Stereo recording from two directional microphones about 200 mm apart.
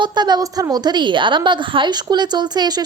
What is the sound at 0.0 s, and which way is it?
A woman's voice, 20° right (ahead or behind).